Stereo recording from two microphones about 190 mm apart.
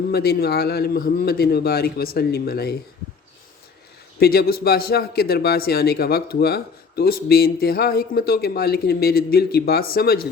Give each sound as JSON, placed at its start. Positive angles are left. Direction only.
{"t": 0.1, "sound": "speech", "side_deg": 55}
{"t": 4.2, "sound": "speech", "side_deg": 55}